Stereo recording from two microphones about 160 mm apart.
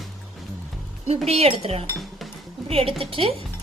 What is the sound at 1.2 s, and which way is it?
Speech, 40° right (ahead or behind).